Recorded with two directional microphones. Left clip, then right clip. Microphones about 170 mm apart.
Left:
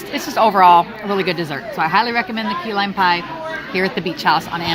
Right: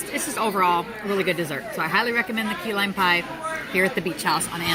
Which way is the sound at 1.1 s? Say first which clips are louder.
Left 4 dB; 5° left (ahead or behind).